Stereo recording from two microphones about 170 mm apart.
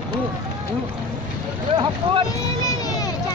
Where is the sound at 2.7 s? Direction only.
20° left (ahead or behind).